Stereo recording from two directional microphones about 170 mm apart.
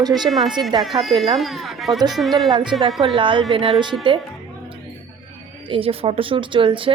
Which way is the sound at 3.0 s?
30° right (ahead or behind).